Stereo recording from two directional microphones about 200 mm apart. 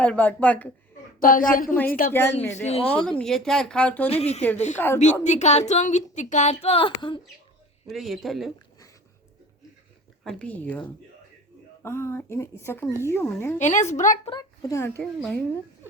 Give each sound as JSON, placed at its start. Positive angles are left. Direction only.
{"t": 0.0, "sound": "a woman's voice", "side_deg": 10}
{"t": 1.2, "sound": "a woman's voice", "side_deg": 45}
{"t": 2.4, "sound": "a woman's voice", "side_deg": 10}
{"t": 4.1, "sound": "a woman's voice", "side_deg": 30}
{"t": 7.9, "sound": "speech", "side_deg": 0}
{"t": 10.3, "sound": "a woman's voice", "side_deg": 5}
{"t": 13.6, "sound": "a woman's voice", "side_deg": 35}
{"t": 14.3, "sound": "a woman's voice", "side_deg": 20}